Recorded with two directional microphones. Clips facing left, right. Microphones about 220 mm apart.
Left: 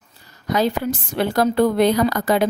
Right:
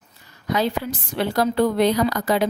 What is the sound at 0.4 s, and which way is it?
Speech, 45° left (ahead or behind).